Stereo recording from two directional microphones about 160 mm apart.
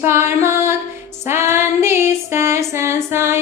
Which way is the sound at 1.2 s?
15° right (ahead or behind).